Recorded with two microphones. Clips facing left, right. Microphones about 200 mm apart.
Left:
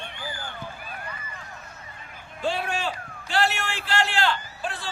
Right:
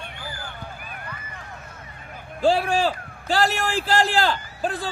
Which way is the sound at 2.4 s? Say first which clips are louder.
Right 8 dB; 35° right (ahead or behind).